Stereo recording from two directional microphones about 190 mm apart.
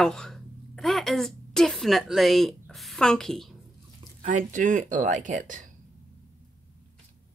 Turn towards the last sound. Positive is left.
turn(degrees=-40)  # may be behind; listen again after turning